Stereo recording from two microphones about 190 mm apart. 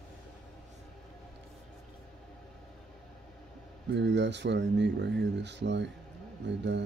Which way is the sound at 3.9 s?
65° right (ahead or behind).